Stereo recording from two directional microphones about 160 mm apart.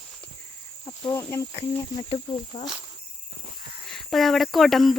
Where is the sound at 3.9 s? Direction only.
Centre (ahead or behind).